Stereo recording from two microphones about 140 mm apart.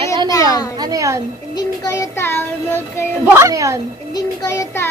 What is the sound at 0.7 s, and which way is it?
Speech, 25° right (ahead or behind).